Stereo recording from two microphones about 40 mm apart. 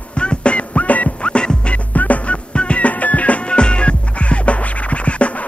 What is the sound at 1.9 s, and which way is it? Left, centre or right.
Music, left.